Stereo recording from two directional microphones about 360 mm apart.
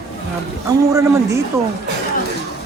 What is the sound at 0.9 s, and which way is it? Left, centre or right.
Speech, centre.